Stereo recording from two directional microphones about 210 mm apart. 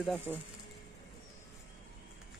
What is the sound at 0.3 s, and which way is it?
Speech, centre (ahead or behind).